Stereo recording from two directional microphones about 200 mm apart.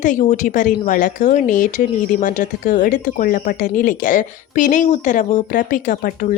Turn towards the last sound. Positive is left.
turn(degrees=40)  # may be behind; listen again after turning